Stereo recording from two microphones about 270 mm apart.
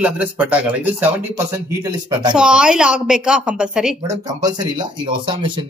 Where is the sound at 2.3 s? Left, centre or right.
Centre.